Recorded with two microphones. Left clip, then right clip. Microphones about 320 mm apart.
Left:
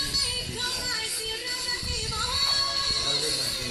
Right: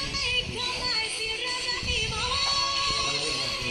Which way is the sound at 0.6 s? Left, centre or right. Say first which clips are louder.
Right 1 dB; centre.